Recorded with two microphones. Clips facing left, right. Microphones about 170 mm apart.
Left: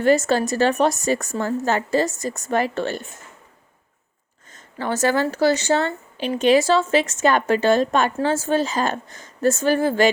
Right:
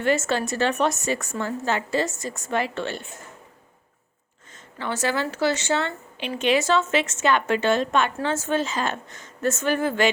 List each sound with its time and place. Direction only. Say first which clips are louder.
0.0 s speech: left 5 dB; 40° left (ahead or behind)
4.5 s speech: left 5 dB; 40° left (ahead or behind)